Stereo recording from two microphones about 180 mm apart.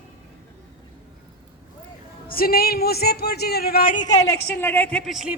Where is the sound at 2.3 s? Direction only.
55° left (ahead or behind).